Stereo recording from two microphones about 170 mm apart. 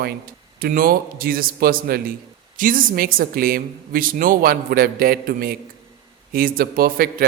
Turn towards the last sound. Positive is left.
turn(degrees=-60)  # may be behind; listen again after turning